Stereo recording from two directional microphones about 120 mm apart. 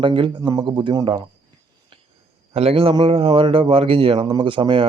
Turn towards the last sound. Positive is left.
turn(degrees=-45)  # may be behind; listen again after turning